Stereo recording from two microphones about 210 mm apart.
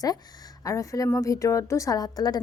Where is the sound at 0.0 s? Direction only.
15° left (ahead or behind).